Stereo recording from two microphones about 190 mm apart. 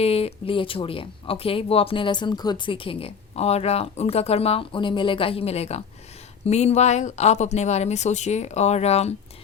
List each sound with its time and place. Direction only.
0.0 s speech: 30° left (ahead or behind)